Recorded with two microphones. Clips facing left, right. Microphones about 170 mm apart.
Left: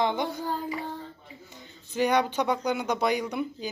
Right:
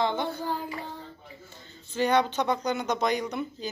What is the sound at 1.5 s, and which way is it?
Speech, 15° left (ahead or behind).